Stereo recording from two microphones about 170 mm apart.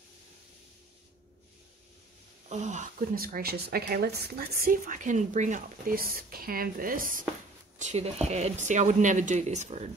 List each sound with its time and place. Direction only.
2.5 s speech: 45° right (ahead or behind)
7.8 s speech: 40° right (ahead or behind)